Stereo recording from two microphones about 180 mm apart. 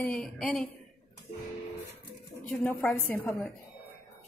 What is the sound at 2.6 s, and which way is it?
Speech, 10° left (ahead or behind).